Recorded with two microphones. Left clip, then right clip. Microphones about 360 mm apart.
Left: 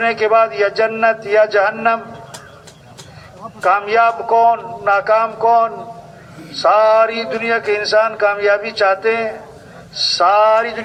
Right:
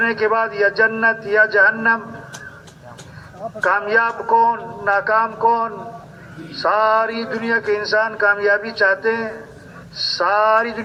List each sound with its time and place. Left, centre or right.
0.0 s a man's voice: left
3.6 s a man's voice: left